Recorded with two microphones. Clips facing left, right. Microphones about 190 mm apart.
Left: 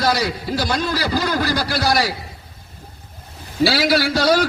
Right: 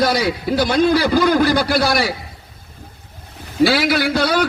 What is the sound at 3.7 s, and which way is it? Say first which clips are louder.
Speech: right 1 dB; 55° right (ahead or behind).